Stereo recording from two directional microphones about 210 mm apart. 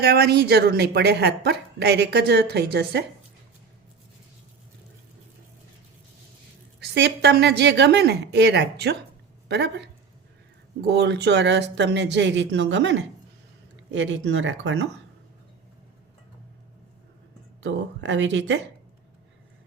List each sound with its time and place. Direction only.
0.0 s a woman's voice: 50° right (ahead or behind)
6.7 s a woman's voice: 50° right (ahead or behind)
17.6 s speech: 60° right (ahead or behind)